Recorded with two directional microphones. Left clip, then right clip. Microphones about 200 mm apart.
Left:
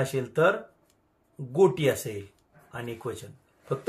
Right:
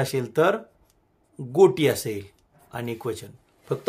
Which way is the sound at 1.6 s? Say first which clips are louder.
Right 4 dB; 45° right (ahead or behind).